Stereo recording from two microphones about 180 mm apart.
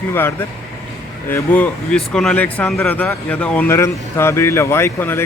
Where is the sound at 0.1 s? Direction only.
10° left (ahead or behind).